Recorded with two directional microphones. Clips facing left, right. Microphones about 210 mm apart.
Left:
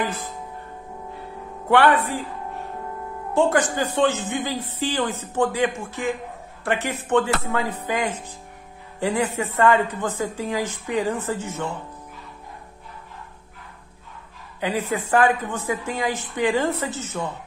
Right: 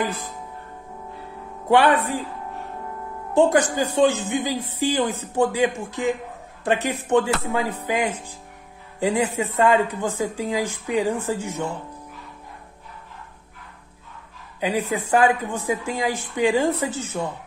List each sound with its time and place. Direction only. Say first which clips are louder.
1.7 s speech: even; 15° right (ahead or behind)
3.3 s speech: right 2 dB; 15° right (ahead or behind)
14.6 s speech: right 1 dB; 15° right (ahead or behind)